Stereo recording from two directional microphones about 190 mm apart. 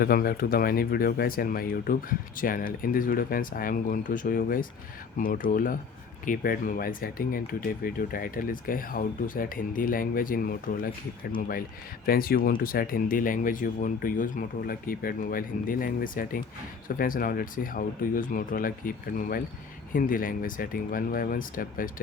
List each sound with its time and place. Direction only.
0.0 s speech: 50° left (ahead or behind)